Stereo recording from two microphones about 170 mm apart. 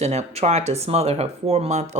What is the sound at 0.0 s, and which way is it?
Speech, 40° right (ahead or behind).